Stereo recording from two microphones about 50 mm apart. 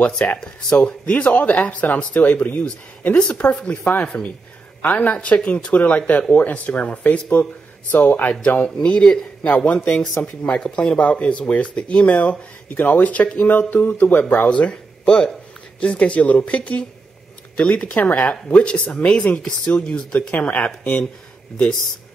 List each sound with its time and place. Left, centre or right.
0.2 s speech: left
20.5 s speech: left